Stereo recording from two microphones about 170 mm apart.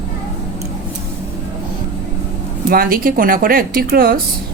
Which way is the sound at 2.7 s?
60° right (ahead or behind).